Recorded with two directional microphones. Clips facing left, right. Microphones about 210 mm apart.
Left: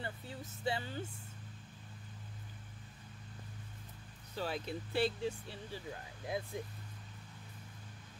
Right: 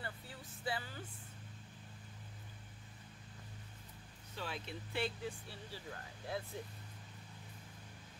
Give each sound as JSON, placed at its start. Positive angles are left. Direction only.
{"t": 0.0, "sound": "vehicle", "side_deg": 25}
{"t": 4.4, "sound": "speech", "side_deg": 40}
{"t": 5.5, "sound": "speech", "side_deg": 15}